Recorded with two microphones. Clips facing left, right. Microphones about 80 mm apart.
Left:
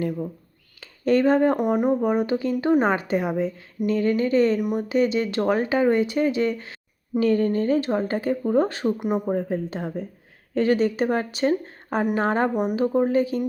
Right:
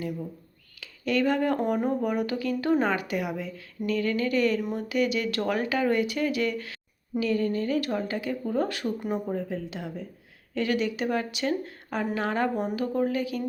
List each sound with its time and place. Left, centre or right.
0.8 s speech: left
1.5 s speech: centre
7.2 s speech: left
9.2 s speech: left
12.5 s speech: left